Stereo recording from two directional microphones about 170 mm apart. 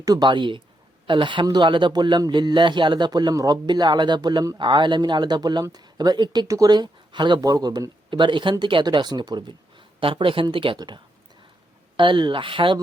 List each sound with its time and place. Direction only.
0.0 s a man's voice: 25° right (ahead or behind)